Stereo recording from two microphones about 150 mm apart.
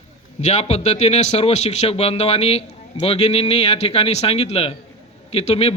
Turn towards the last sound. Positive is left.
turn(degrees=45)  # may be behind; listen again after turning